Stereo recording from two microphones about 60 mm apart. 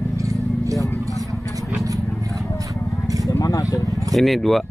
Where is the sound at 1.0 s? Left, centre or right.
Right.